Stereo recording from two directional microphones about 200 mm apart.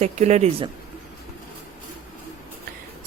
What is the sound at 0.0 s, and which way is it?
Speech, 35° right (ahead or behind).